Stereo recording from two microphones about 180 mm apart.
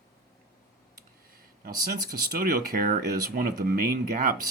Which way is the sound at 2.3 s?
50° right (ahead or behind).